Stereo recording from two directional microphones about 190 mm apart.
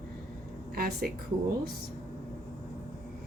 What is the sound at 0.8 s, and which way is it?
Speech, 55° right (ahead or behind).